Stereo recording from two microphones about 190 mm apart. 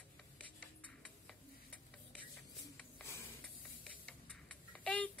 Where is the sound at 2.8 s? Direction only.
10° left (ahead or behind).